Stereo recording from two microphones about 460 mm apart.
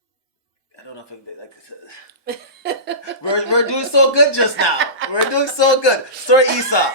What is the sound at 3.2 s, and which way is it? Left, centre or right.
Speech, left.